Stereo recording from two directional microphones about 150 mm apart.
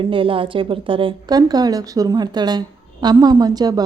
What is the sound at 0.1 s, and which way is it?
A woman's voice, 35° right (ahead or behind).